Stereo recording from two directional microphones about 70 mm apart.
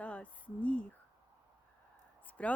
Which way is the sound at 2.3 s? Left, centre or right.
Centre.